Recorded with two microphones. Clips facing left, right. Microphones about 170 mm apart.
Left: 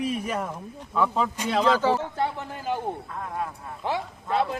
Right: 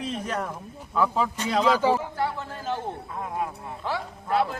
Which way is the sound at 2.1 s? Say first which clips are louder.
Left 1 dB; 20° left (ahead or behind).